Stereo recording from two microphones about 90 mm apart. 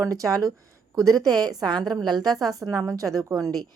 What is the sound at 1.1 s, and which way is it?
Speech, 5° left (ahead or behind).